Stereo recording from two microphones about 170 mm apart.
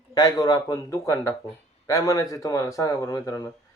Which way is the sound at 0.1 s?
25° left (ahead or behind).